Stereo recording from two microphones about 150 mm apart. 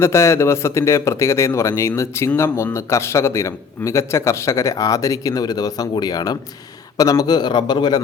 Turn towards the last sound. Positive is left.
turn(degrees=30)  # may be behind; listen again after turning